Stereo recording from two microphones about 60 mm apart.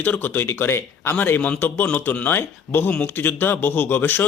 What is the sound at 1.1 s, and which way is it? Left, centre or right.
Speech, left.